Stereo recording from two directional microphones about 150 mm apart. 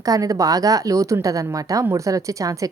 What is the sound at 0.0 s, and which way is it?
A woman's voice, 25° right (ahead or behind).